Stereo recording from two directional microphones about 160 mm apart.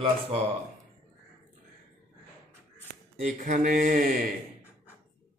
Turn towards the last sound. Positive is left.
turn(degrees=-60)  # may be behind; listen again after turning